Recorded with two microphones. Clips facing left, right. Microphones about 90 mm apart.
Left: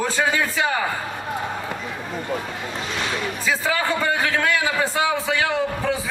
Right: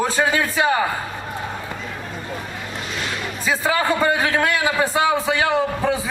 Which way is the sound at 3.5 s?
20° right (ahead or behind).